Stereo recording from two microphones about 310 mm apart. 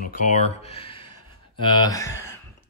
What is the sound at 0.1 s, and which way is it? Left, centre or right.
Speech, left.